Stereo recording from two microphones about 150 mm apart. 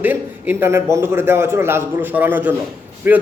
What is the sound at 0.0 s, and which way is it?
A man's voice, 15° right (ahead or behind).